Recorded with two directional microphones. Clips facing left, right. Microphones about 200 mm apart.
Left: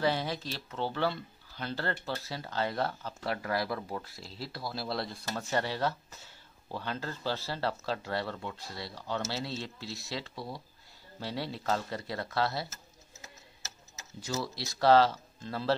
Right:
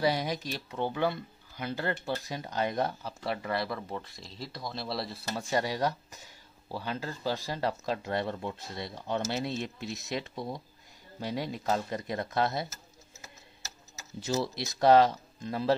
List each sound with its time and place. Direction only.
0.0 s speech: 15° right (ahead or behind)
3.3 s speech: centre (ahead or behind); by 12.6 s 20° right (ahead or behind)
14.2 s speech: 25° right (ahead or behind)